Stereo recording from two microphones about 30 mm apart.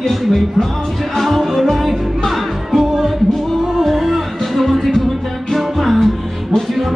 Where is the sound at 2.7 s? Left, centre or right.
Centre.